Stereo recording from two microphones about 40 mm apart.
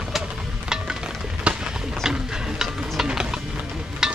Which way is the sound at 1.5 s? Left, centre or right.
Right.